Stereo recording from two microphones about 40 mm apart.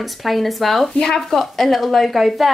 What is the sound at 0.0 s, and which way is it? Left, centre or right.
A woman's voice, centre.